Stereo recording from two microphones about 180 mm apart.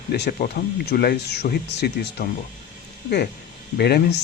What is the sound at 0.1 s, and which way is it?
Speech, 60° left (ahead or behind).